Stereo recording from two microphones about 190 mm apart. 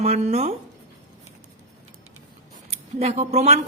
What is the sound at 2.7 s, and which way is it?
Scissors, 35° right (ahead or behind).